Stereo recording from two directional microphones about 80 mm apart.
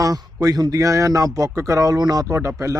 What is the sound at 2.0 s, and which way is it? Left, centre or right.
Speech, right.